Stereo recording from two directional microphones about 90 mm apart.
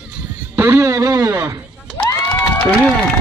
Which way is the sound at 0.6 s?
30° right (ahead or behind).